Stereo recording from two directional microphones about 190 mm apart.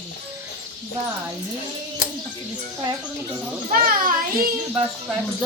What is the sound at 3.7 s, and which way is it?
Children playing, 45° right (ahead or behind).